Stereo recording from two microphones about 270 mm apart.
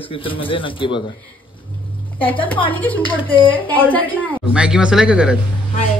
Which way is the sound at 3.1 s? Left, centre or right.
Centre.